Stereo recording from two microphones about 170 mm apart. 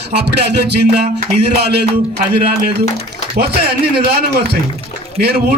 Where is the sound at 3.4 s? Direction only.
65° right (ahead or behind).